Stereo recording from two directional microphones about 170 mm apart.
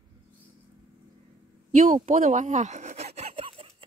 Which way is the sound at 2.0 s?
50° right (ahead or behind).